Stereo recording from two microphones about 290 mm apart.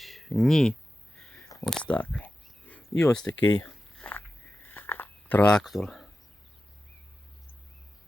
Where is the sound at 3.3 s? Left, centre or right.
Left.